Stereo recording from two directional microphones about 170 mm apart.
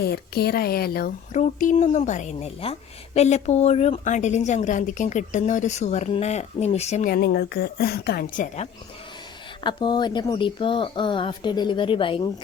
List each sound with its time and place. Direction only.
0.0 s a woman's voice: 70° left (ahead or behind)
1.3 s a woman's voice: 45° left (ahead or behind)
7.1 s a woman's voice: 65° left (ahead or behind)
9.6 s speech: 25° left (ahead or behind)